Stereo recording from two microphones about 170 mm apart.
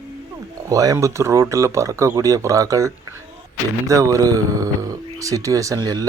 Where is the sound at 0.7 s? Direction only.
20° right (ahead or behind).